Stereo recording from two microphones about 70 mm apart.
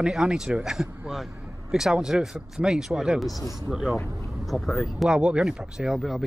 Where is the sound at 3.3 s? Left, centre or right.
Left.